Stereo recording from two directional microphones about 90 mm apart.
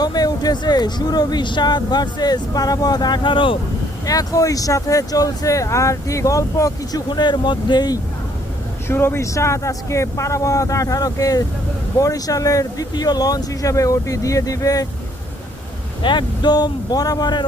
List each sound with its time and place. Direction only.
0.0 s speech: 45° left (ahead or behind); by 3.6 s 70° left (ahead or behind)
4.0 s speech: 40° left (ahead or behind)
7.1 s speech: 55° left (ahead or behind)
8.9 s speech: 25° left (ahead or behind)
16.0 s speech: 55° left (ahead or behind)